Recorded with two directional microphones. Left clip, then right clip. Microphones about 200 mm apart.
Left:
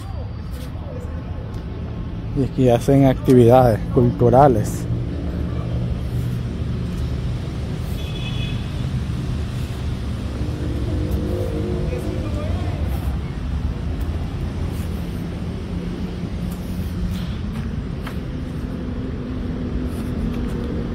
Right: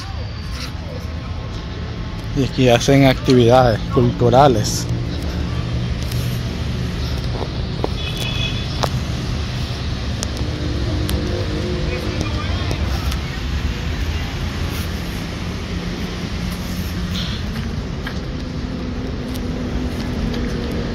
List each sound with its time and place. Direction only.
2.4 s speech: 15° left (ahead or behind)
3.3 s speech: 25° left (ahead or behind)
3.9 s speech: 10° left (ahead or behind)